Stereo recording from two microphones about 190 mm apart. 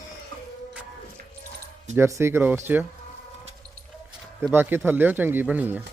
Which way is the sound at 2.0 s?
15° right (ahead or behind).